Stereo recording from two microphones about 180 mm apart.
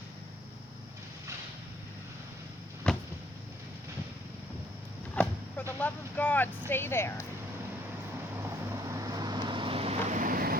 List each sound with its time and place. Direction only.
2.8 s a sound: 5° left (ahead or behind)
5.1 s vehicle: 5° left (ahead or behind)
6.7 s speech: 10° left (ahead or behind)
8.4 s vehicle: 15° right (ahead or behind); by 10.6 s 55° right (ahead or behind)